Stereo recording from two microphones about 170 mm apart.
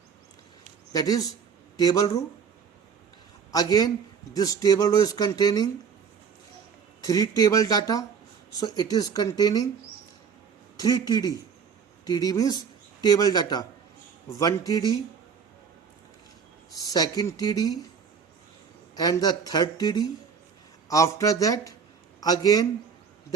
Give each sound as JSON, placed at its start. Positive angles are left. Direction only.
{"t": 0.9, "sound": "speech", "side_deg": 20}
{"t": 3.5, "sound": "speech", "side_deg": 20}
{"t": 7.1, "sound": "speech", "side_deg": 20}
{"t": 10.8, "sound": "speech", "side_deg": 20}
{"t": 16.9, "sound": "speech", "side_deg": 20}
{"t": 18.9, "sound": "speech", "side_deg": 20}